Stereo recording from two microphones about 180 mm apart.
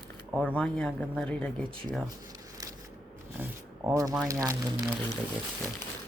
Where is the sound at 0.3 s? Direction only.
5° left (ahead or behind).